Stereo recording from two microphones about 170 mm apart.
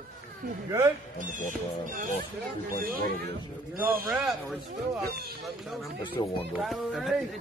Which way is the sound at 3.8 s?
60° right (ahead or behind).